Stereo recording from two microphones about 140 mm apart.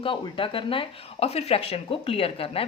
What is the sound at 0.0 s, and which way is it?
Speech, 35° left (ahead or behind).